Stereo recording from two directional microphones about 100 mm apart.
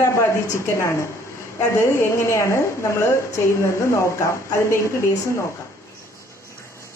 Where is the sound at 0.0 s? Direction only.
30° left (ahead or behind).